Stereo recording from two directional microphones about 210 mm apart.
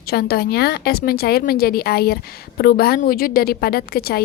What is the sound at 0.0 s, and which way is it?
A woman's voice, 45° left (ahead or behind).